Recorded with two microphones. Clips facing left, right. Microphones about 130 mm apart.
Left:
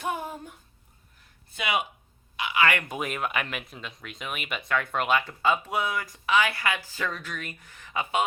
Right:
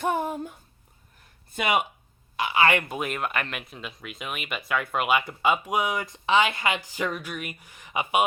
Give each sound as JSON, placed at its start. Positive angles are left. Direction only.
{"t": 0.0, "sound": "a sound", "side_deg": -50}
{"t": 1.5, "sound": "speech", "side_deg": -50}
{"t": 2.3, "sound": "speech", "side_deg": -40}
{"t": 2.8, "sound": "speech", "side_deg": 0}